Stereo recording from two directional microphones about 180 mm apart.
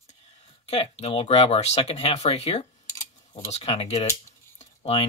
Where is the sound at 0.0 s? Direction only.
40° left (ahead or behind).